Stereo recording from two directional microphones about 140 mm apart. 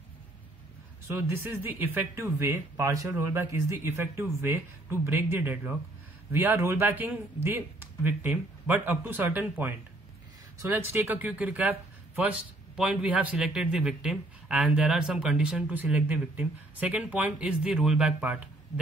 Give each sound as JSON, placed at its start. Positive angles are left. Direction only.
{"t": 1.0, "sound": "a man's voice", "side_deg": -15}